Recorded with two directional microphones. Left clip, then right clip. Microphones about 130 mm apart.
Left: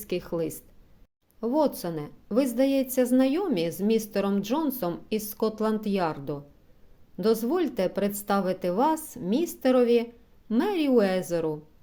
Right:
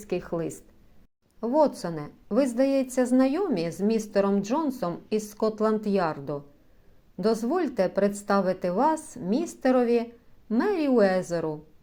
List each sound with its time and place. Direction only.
0.0 s a woman's voice: 20° left (ahead or behind)